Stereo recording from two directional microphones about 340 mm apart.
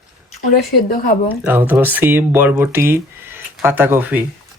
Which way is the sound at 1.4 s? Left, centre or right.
Centre.